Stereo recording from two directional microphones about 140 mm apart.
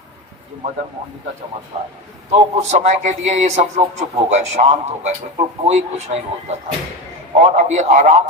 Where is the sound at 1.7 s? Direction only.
45° right (ahead or behind).